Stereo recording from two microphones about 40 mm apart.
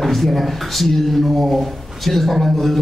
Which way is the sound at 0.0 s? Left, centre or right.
Centre.